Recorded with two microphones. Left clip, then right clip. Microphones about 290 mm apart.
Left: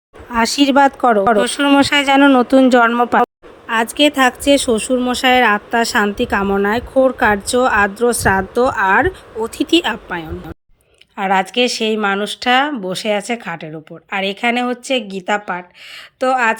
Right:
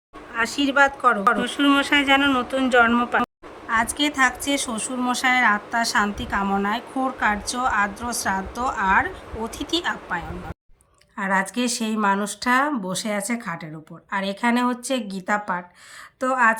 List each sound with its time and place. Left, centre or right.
0.3 s speech: centre
3.7 s speech: centre